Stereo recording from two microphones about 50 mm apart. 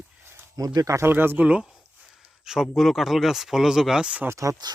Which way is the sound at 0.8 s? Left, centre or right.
Right.